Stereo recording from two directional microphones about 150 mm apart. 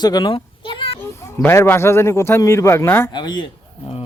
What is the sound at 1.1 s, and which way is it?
A man's voice, 15° left (ahead or behind).